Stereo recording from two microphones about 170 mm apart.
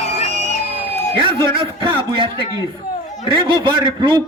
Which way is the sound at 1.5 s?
30° right (ahead or behind).